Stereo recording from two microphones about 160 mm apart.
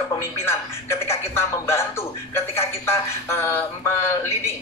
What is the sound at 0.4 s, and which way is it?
Music, 15° left (ahead or behind).